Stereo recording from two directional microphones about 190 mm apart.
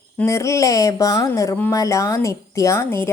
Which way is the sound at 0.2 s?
15° left (ahead or behind).